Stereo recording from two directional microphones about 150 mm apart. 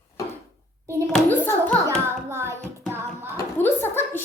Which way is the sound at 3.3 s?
15° left (ahead or behind).